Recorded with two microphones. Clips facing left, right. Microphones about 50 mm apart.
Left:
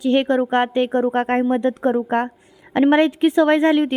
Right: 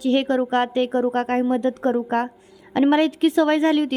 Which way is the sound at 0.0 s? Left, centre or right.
Left.